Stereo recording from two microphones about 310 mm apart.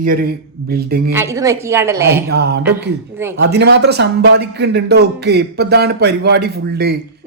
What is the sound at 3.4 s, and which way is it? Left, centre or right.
Speech, right.